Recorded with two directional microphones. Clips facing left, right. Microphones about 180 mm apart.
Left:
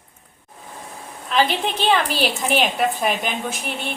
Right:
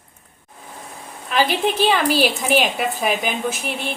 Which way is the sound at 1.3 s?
5° right (ahead or behind).